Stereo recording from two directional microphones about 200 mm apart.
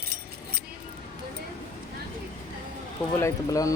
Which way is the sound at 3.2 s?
15° left (ahead or behind).